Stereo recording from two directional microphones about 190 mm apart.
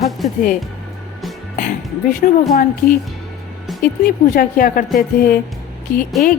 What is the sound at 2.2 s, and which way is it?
Speech, 45° left (ahead or behind).